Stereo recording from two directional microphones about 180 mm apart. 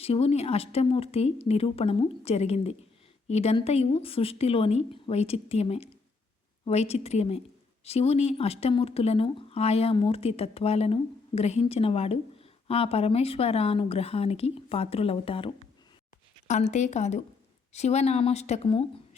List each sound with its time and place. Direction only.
0.0 s speech: 35° left (ahead or behind)